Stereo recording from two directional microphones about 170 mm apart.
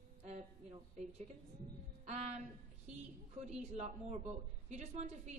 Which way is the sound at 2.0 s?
40° right (ahead or behind).